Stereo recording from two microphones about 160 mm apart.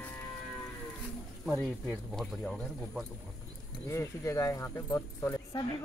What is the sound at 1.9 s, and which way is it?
Speech, centre (ahead or behind).